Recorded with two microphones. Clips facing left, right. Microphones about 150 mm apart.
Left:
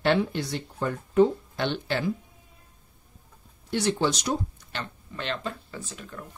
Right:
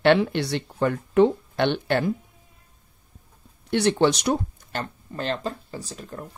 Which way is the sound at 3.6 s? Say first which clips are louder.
Right 5 dB; 65° right (ahead or behind).